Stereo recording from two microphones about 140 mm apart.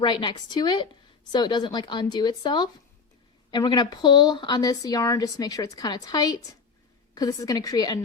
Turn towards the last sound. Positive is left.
turn(degrees=25)  # may be behind; listen again after turning